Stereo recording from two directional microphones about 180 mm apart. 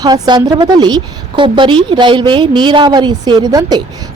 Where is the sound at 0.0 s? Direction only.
25° right (ahead or behind).